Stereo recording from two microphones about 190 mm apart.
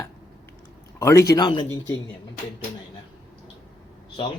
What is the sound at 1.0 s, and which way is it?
Speech, 15° left (ahead or behind).